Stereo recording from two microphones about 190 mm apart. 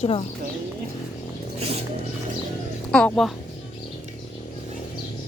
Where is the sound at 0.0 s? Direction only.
30° left (ahead or behind).